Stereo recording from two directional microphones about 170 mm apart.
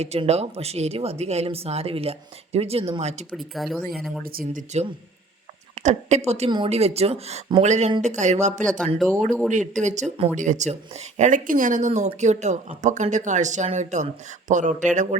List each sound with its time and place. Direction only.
0.0 s speech: 40° right (ahead or behind)
3.3 s speech: centre (ahead or behind)
4.2 s speech: 60° right (ahead or behind)
5.8 s speech: 40° right (ahead or behind)
9.2 s speech: 5° left (ahead or behind)
9.5 s speech: 45° right (ahead or behind)